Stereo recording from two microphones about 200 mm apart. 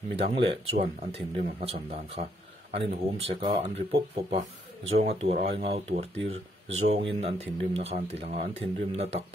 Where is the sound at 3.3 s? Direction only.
25° right (ahead or behind).